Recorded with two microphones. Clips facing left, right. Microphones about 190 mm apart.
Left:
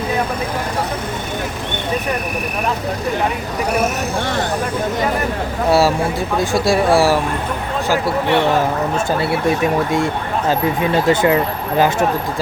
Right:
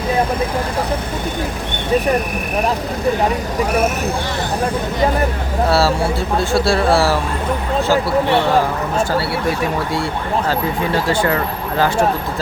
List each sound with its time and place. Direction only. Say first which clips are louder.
5.6 s speech: left 2 dB; 15° left (ahead or behind)
10.5 s speech: left 6 dB; 20° left (ahead or behind)